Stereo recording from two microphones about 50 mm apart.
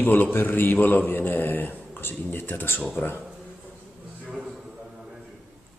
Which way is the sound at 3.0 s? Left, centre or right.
Left.